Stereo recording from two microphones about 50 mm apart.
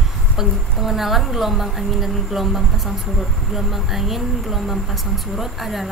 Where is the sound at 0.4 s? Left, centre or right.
Centre.